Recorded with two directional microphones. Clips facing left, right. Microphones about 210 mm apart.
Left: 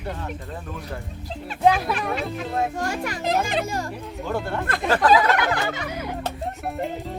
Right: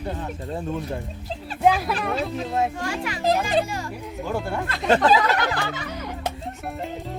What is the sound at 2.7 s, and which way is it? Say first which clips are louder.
Speech: left 1 dB; 45° left (ahead or behind).